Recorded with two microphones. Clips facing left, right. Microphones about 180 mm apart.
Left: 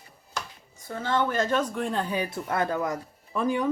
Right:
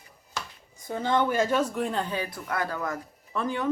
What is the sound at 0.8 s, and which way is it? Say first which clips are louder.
A woman's voice: right 2 dB; 15° right (ahead or behind).